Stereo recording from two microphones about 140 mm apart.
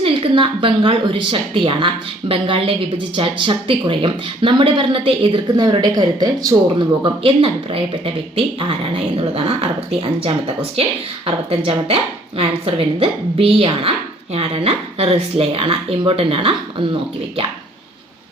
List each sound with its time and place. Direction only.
0.0 s speech: 40° right (ahead or behind)